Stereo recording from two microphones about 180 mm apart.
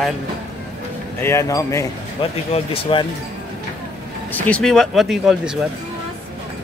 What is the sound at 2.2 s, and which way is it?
Speech, 30° left (ahead or behind).